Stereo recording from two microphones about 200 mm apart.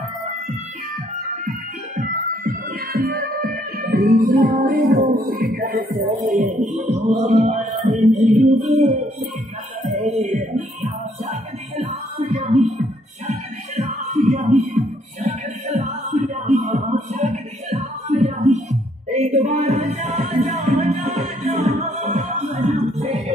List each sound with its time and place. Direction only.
2.0 s music: 45° right (ahead or behind)
6.3 s music: 35° right (ahead or behind)
9.8 s a sound: 35° right (ahead or behind)
10.2 s music: 30° right (ahead or behind)
13.7 s music: 35° right (ahead or behind)